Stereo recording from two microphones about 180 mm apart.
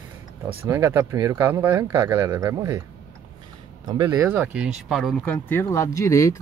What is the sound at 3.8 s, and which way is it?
Speech, 15° right (ahead or behind).